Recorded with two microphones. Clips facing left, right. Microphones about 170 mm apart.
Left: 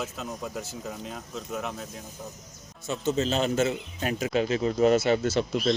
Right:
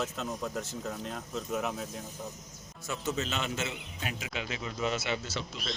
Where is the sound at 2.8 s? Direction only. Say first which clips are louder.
Left 7 dB; 25° left (ahead or behind); by 5.6 s 55° left (ahead or behind).